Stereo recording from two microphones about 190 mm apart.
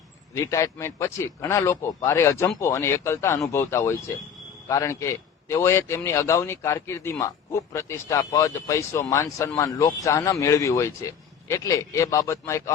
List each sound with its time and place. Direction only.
0.3 s a man's voice: 15° left (ahead or behind)